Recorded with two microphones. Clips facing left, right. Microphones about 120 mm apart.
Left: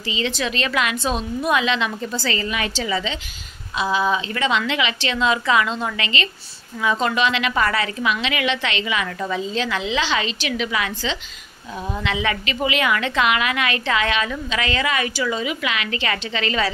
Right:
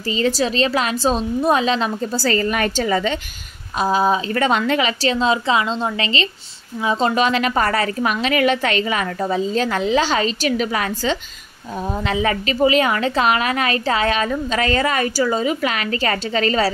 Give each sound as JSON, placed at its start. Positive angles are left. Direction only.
{"t": 0.1, "sound": "a woman's voice", "side_deg": -40}